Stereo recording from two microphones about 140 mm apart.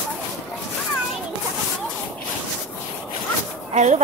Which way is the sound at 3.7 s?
55° right (ahead or behind).